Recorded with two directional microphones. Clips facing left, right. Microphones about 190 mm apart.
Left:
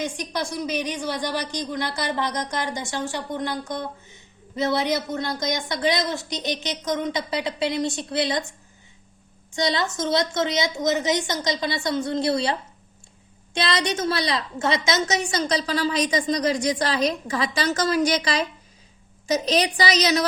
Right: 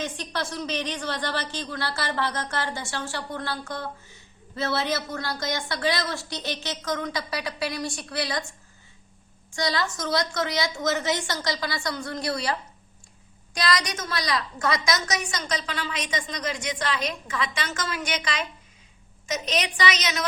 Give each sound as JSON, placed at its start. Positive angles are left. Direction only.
{"t": 0.0, "sound": "speech", "side_deg": 15}
{"t": 9.6, "sound": "a woman's voice", "side_deg": 20}